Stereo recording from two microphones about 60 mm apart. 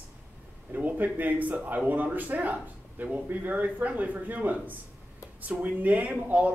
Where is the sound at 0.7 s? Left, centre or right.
Right.